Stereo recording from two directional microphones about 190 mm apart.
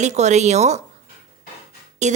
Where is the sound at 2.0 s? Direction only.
40° right (ahead or behind).